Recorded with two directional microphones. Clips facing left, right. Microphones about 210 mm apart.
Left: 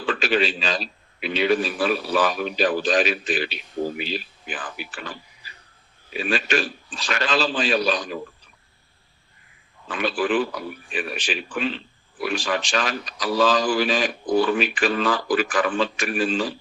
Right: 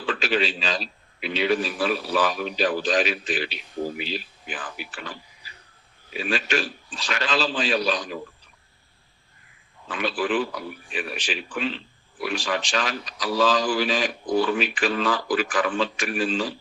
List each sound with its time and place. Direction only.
0.0 s a man's voice: 50° left (ahead or behind)
6.1 s a man's voice: 50° left (ahead or behind)
9.9 s a man's voice: 50° left (ahead or behind)